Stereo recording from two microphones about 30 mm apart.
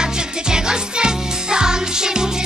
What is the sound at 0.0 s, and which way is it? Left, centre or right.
Music, right.